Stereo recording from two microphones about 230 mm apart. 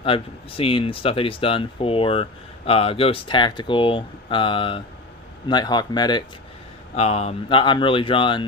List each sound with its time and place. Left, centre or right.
0.0 s speech: left